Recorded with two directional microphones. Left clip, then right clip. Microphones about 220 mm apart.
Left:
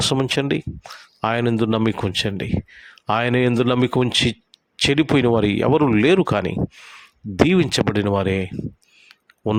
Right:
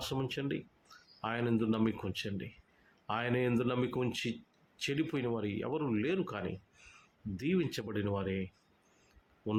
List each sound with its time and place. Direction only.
0.0 s speech: 50° left (ahead or behind)